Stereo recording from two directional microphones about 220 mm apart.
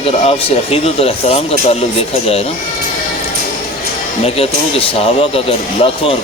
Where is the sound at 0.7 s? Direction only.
25° left (ahead or behind).